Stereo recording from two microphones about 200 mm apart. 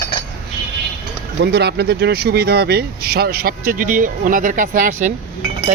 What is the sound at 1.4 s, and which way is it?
Speech, 55° right (ahead or behind).